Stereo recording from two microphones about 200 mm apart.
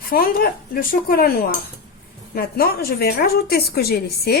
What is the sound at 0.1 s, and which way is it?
A woman's voice, 50° left (ahead or behind).